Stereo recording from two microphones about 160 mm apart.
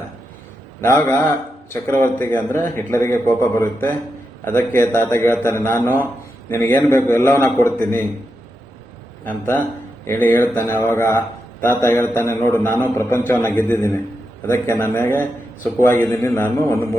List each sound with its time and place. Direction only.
0.8 s a man's voice: 15° left (ahead or behind)
9.2 s a man's voice: 10° left (ahead or behind)